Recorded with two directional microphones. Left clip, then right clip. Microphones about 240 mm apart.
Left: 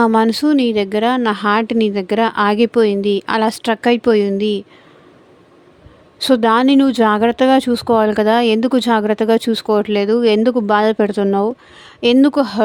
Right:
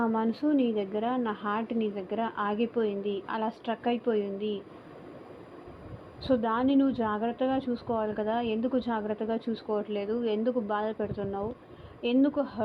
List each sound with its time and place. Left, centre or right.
0.0 s speech: left
6.2 s speech: left